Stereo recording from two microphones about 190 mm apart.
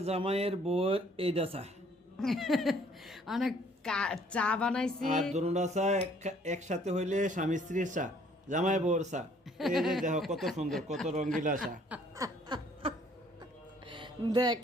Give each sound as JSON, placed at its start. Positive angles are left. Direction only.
{"t": 0.0, "sound": "speech", "side_deg": -30}
{"t": 2.1, "sound": "a woman's voice", "side_deg": 0}
{"t": 4.9, "sound": "speech", "side_deg": -45}
{"t": 9.6, "sound": "a woman's voice", "side_deg": 0}
{"t": 10.9, "sound": "speech", "side_deg": -35}
{"t": 12.1, "sound": "snicker", "side_deg": -20}
{"t": 13.8, "sound": "music", "side_deg": -25}